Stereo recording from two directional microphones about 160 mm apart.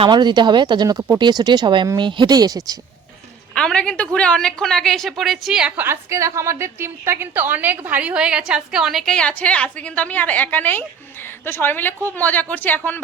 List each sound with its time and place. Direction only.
0.0 s speech: 30° right (ahead or behind)
3.5 s a woman's voice: 5° left (ahead or behind)